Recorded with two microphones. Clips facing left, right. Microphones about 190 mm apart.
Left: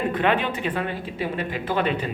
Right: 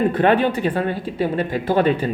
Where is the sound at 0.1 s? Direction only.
40° right (ahead or behind).